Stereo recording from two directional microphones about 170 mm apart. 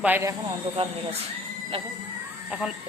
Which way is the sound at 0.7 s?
35° right (ahead or behind).